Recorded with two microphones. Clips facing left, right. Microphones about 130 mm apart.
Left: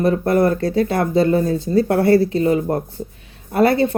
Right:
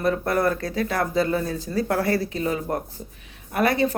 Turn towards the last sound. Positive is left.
turn(degrees=30)  # may be behind; listen again after turning